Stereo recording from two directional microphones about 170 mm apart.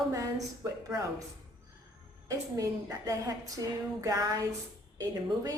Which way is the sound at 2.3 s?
20° right (ahead or behind).